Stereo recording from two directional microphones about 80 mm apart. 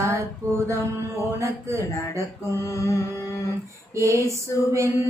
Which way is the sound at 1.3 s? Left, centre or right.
Right.